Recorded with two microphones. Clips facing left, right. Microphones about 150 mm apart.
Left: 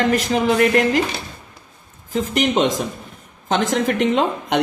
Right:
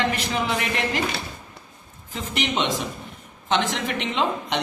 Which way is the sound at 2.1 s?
40° left (ahead or behind).